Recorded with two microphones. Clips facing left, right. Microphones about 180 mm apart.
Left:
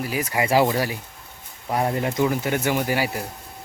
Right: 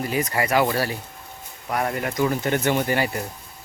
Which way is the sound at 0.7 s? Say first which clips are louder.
Even; 10° left (ahead or behind).